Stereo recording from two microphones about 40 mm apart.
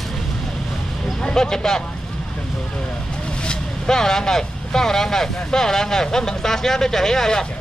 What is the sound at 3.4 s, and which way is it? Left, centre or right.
Vehicle, left.